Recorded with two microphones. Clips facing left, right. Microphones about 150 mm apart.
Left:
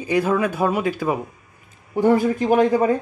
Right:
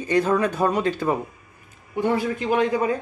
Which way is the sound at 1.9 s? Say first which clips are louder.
Left 6 dB; 45° left (ahead or behind).